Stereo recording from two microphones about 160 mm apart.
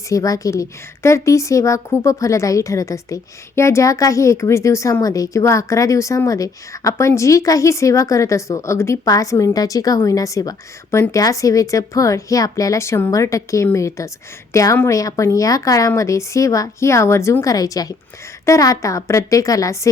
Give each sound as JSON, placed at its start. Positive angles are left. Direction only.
{"t": 0.1, "sound": "a woman's voice", "side_deg": 20}